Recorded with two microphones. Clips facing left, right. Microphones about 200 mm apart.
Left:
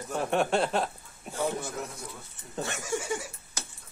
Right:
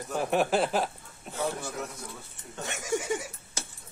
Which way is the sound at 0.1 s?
5° right (ahead or behind).